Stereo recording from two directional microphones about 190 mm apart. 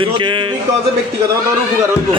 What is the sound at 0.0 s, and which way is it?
Speech, 25° right (ahead or behind).